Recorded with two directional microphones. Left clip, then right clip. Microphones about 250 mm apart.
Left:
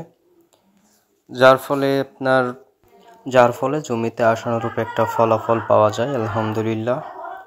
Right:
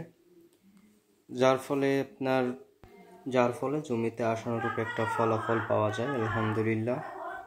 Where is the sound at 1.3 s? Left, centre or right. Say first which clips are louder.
Left 13 dB; centre.